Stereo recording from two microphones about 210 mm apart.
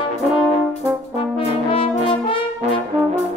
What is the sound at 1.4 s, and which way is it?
Brass instrument, 25° left (ahead or behind).